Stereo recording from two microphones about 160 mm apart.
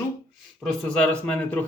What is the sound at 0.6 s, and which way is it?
Speech, 5° left (ahead or behind).